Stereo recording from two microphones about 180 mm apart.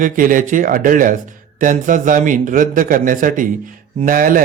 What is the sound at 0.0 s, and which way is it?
A man's voice, 50° right (ahead or behind).